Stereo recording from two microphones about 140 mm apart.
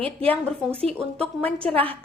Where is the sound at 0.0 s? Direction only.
45° right (ahead or behind).